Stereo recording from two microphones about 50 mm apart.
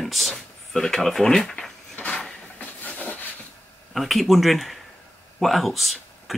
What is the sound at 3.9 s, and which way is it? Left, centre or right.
Speech, centre.